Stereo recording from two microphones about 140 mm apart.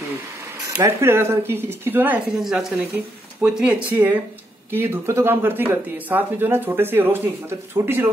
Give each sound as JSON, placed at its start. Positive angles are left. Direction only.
{"t": 0.7, "sound": "speech", "side_deg": -20}
{"t": 2.4, "sound": "speech", "side_deg": 0}